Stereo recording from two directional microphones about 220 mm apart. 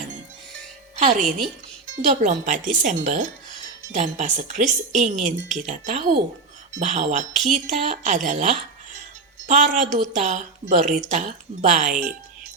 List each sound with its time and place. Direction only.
0.9 s a woman's voice: 35° right (ahead or behind)